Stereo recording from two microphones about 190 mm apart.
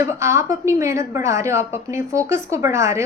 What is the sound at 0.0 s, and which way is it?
A woman's voice, 15° right (ahead or behind).